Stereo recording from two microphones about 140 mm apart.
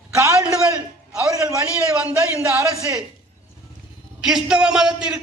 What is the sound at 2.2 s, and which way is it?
Speech, 20° right (ahead or behind).